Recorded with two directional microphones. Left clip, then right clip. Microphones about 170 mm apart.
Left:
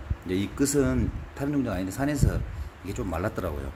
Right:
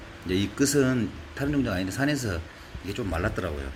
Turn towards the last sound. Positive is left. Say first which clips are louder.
# right 1 dB
turn(degrees=15)  # may be behind; listen again after turning